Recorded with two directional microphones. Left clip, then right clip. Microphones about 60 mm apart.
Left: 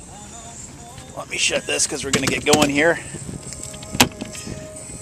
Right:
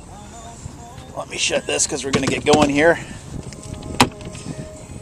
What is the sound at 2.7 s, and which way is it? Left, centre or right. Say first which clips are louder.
Speech: right 2 dB; right.